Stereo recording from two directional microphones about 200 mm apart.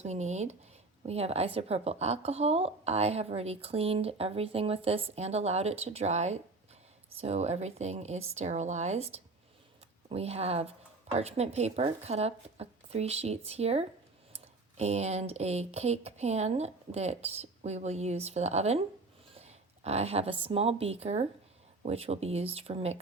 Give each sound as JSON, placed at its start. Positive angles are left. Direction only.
{"t": 0.0, "sound": "speech", "side_deg": -35}